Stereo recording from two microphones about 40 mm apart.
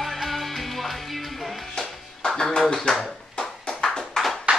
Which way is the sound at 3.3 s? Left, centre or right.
Left.